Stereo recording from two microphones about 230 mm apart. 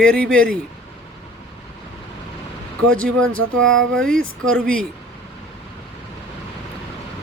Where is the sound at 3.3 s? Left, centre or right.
Right.